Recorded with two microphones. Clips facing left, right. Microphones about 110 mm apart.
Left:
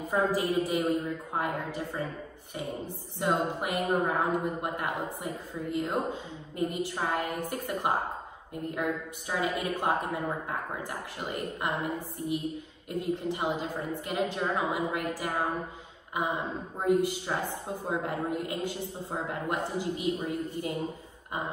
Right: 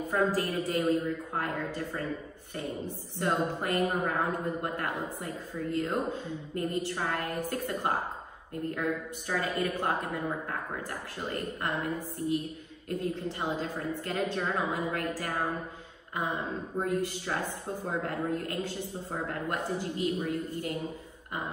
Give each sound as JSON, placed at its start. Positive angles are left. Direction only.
{"t": 0.1, "sound": "speech", "side_deg": 15}
{"t": 3.2, "sound": "speech", "side_deg": 15}